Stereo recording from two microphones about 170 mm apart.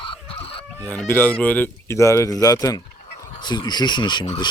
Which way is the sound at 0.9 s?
10° left (ahead or behind).